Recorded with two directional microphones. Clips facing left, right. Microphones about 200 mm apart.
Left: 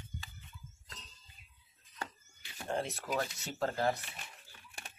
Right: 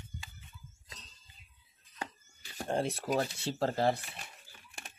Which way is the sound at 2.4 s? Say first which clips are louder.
Right 4 dB; 35° right (ahead or behind).